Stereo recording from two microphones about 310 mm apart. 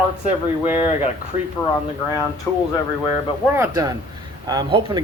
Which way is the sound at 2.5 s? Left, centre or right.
Centre.